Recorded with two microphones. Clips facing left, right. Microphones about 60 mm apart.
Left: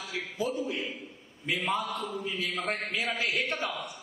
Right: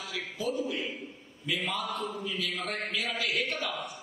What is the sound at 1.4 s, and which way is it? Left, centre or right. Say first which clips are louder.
A man's voice: left 2 dB; left.